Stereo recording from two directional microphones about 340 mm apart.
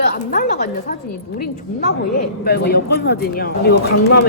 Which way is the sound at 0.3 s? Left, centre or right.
Left.